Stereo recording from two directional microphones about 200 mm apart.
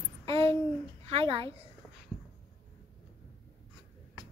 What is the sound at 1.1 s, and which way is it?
Speech, 25° right (ahead or behind).